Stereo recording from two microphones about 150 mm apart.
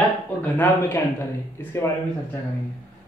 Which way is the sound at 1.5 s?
15° left (ahead or behind).